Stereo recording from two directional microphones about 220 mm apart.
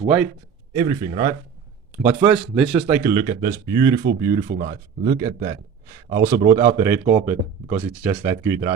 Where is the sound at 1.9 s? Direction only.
10° right (ahead or behind).